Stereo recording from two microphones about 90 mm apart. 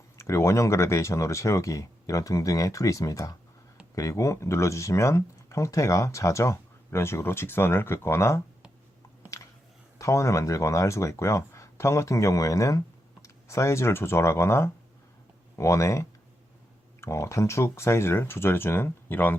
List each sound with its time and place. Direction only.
0.2 s speech: 35° left (ahead or behind)
10.0 s speech: 35° left (ahead or behind)